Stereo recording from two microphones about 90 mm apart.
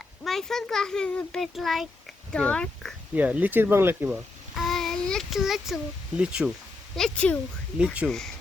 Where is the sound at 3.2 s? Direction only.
15° right (ahead or behind).